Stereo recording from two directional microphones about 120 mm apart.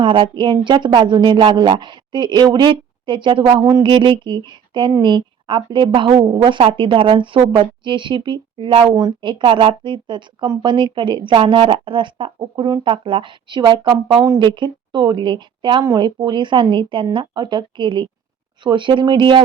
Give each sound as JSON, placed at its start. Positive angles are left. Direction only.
{"t": 0.0, "sound": "a woman's voice", "side_deg": -45}
{"t": 3.6, "sound": "speech", "side_deg": -30}
{"t": 3.8, "sound": "a woman's voice", "side_deg": -40}